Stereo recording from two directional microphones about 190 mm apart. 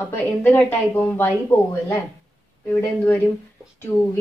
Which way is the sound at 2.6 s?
10° left (ahead or behind).